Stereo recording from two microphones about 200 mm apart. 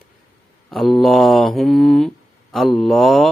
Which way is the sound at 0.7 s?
Centre (ahead or behind).